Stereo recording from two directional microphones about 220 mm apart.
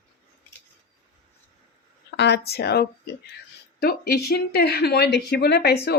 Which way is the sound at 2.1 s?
50° left (ahead or behind).